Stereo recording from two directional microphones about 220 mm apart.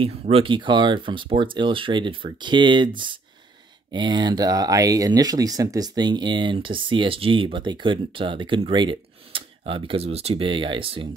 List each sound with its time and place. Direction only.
0.0 s speech: 25° right (ahead or behind)
3.9 s speech: 20° right (ahead or behind)